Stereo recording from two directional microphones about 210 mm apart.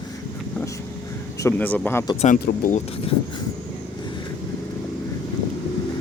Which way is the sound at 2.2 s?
40° left (ahead or behind).